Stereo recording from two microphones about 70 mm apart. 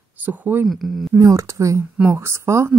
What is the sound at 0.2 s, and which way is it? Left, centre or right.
Speech, right.